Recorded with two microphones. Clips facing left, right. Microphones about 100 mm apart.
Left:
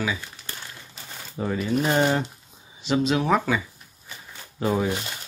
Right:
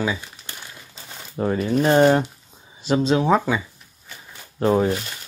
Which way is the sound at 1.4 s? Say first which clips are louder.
Right 4 dB; 45° right (ahead or behind).